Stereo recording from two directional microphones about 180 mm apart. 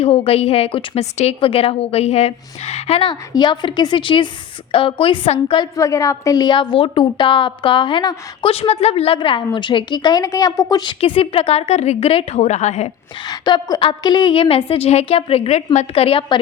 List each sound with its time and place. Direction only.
0.0 s a woman's voice: 35° left (ahead or behind)
5.7 s a woman's voice: 20° left (ahead or behind); by 12.9 s 40° left (ahead or behind)
13.2 s a woman's voice: 25° left (ahead or behind)